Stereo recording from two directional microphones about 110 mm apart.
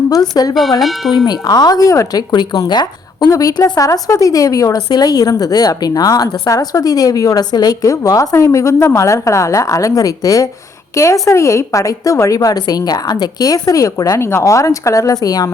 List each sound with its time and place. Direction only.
0.1 s a woman's voice: 35° left (ahead or behind)
0.8 s speech: centre (ahead or behind)
1.1 s a woman's voice: 40° left (ahead or behind)